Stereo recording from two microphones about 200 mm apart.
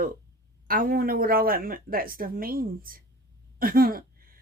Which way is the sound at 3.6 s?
45° right (ahead or behind).